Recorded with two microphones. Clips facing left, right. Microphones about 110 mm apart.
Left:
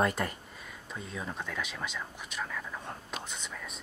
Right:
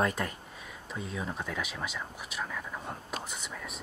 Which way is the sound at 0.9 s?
5° right (ahead or behind).